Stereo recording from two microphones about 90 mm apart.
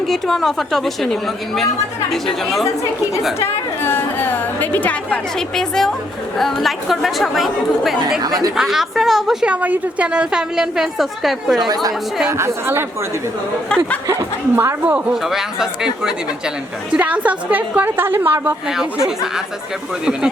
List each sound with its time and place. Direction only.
0.1 s a woman's voice: 5° left (ahead or behind)
3.4 s a woman's voice: 25° left (ahead or behind)
5.5 s a woman's voice: 5° left (ahead or behind)
8.2 s speech: 45° right (ahead or behind)
8.5 s a woman's voice: 5° right (ahead or behind)
11.7 s speech: 45° right (ahead or behind)
12.3 s a woman's voice: 30° right (ahead or behind)
13.7 s speech: 10° left (ahead or behind)
14.5 s a woman's voice: 30° right (ahead or behind)
15.1 s a woman's voice: 5° right (ahead or behind); by 18.5 s 20° right (ahead or behind)
18.8 s speech: 5° right (ahead or behind)